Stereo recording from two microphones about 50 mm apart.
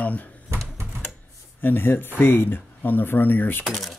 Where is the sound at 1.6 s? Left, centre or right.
Left.